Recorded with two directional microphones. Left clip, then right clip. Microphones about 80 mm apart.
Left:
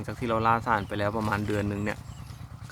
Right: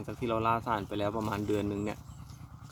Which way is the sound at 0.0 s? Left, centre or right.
Centre.